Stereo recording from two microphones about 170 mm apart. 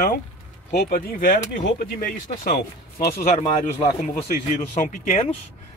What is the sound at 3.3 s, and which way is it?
Speech, 35° left (ahead or behind).